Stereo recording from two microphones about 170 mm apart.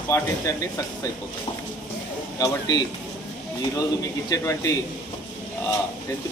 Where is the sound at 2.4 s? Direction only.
20° left (ahead or behind).